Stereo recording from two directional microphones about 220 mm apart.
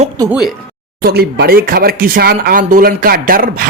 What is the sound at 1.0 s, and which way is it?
Speech, 45° right (ahead or behind).